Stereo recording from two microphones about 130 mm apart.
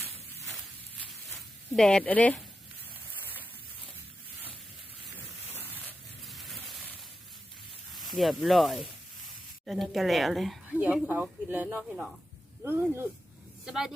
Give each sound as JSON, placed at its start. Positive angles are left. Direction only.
{"t": 1.7, "sound": "speech", "side_deg": 5}
{"t": 6.2, "sound": "a sound", "side_deg": 0}
{"t": 8.1, "sound": "speech", "side_deg": 0}
{"t": 10.7, "sound": "speech", "side_deg": -10}
{"t": 13.7, "sound": "speech", "side_deg": -5}